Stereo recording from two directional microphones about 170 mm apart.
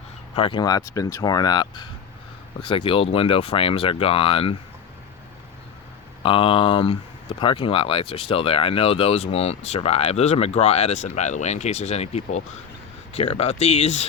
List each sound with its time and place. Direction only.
0.3 s speech: 30° left (ahead or behind)
6.2 s speech: 30° left (ahead or behind)